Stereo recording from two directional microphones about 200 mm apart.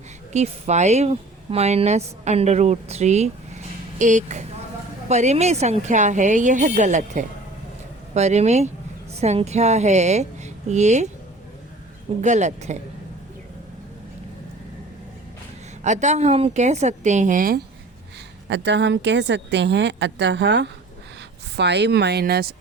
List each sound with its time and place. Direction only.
0.3 s a woman's voice: 35° right (ahead or behind)
12.2 s speech: 35° right (ahead or behind)
15.8 s speech: 35° right (ahead or behind)
18.4 s speech: 60° right (ahead or behind)